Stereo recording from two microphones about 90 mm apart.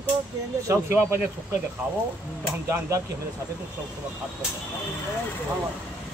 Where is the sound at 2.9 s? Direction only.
40° right (ahead or behind).